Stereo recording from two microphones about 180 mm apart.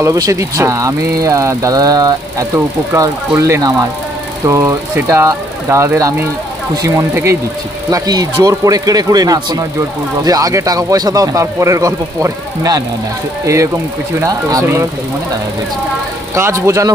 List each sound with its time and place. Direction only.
0.0 s speech: 20° right (ahead or behind)
14.2 s speech: 15° right (ahead or behind)
16.3 s speech: 15° right (ahead or behind)